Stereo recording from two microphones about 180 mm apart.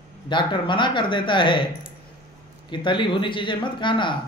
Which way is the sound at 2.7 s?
25° left (ahead or behind).